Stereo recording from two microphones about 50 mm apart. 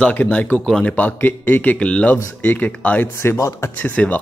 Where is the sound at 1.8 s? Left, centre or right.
Left.